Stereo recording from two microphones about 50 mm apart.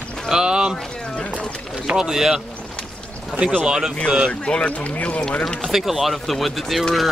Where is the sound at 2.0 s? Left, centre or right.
Centre.